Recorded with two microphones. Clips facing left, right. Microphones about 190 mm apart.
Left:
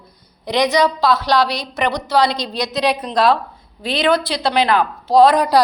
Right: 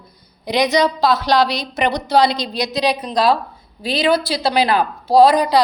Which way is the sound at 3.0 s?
Centre (ahead or behind).